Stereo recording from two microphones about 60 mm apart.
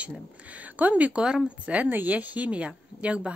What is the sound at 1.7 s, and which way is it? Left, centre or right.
Speech, right.